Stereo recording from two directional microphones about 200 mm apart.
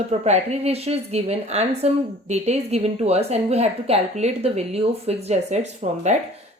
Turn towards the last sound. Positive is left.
turn(degrees=-35)  # may be behind; listen again after turning